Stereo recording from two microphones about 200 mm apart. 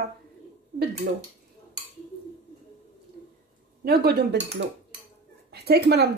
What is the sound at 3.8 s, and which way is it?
Speech, 55° right (ahead or behind).